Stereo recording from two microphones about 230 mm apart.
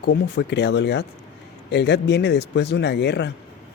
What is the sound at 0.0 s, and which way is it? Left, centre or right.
Speech, left.